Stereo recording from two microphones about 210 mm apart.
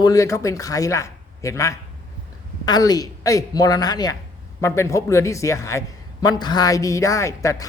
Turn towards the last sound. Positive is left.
turn(degrees=15)  # may be behind; listen again after turning